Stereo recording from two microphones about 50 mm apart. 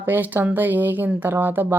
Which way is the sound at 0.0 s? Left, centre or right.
Right.